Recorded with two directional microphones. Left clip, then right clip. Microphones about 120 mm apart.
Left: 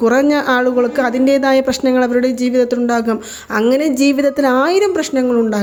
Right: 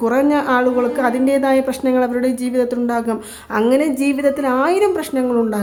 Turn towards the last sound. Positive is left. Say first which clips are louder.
# left 3 dB
turn(degrees=20)  # may be behind; listen again after turning